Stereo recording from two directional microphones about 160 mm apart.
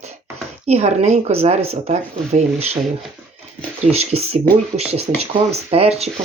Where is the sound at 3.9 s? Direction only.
40° right (ahead or behind).